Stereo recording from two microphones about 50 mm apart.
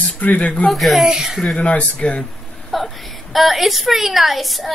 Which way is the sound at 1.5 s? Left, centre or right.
Left.